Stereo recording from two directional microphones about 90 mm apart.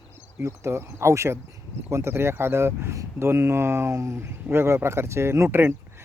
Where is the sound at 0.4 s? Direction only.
30° right (ahead or behind).